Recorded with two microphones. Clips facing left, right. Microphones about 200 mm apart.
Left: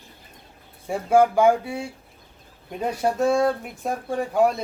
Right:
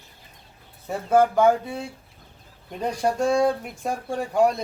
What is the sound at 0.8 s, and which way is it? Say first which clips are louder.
Speech: left 1 dB; 10° left (ahead or behind).